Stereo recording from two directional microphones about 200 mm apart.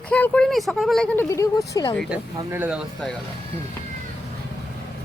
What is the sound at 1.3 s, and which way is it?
Speech, 15° left (ahead or behind).